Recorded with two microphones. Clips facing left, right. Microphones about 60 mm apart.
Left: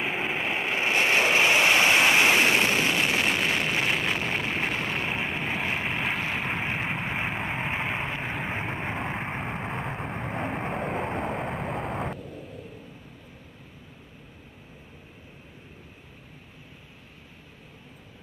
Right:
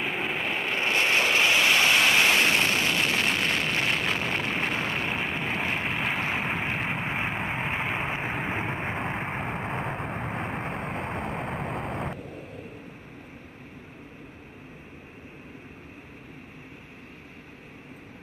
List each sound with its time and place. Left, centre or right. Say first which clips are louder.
0.0 s vehicle: left 1 dB; centre
12.2 s vehicle: right 1 dB; right